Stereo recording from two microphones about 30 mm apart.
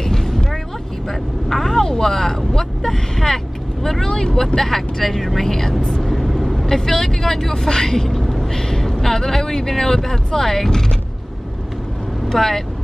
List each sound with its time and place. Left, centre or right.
0.0 s vehicle: centre
3.8 s speech: centre
4.1 s speech: left
4.6 s speech: centre
6.0 s vehicle: centre
6.7 s speech: centre
12.3 s speech: centre